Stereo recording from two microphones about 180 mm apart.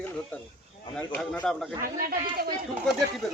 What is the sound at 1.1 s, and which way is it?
Speech, 5° left (ahead or behind).